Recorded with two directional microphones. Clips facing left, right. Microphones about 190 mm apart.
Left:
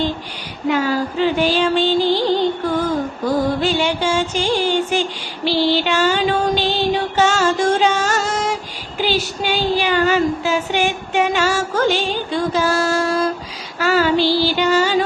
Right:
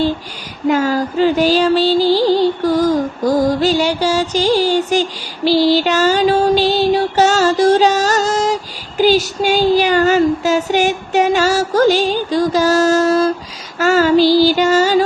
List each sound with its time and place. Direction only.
0.7 s music: 45° right (ahead or behind)
9.0 s a sound: 40° right (ahead or behind)
13.7 s child singing: 45° right (ahead or behind)